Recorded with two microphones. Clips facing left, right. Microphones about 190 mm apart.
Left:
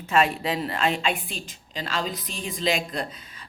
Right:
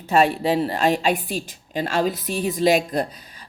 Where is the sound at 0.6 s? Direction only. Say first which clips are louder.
Right 5 dB; 35° right (ahead or behind).